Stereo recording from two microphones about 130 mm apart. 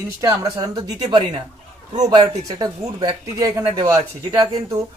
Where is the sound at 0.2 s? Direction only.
25° right (ahead or behind).